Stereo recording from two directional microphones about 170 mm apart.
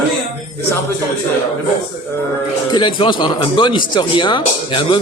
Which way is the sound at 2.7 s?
25° left (ahead or behind).